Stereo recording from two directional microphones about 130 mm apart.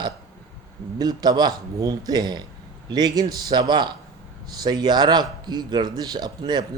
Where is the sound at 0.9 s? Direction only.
30° right (ahead or behind).